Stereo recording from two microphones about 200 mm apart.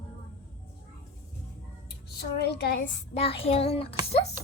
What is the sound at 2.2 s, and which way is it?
Speech, 55° left (ahead or behind).